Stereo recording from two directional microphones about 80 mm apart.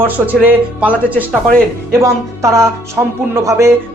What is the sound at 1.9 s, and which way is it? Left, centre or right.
Speech, right.